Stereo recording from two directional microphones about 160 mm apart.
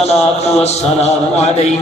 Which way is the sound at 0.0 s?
40° left (ahead or behind).